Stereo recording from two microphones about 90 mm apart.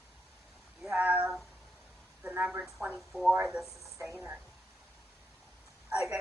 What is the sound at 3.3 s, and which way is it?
Speech, 15° right (ahead or behind).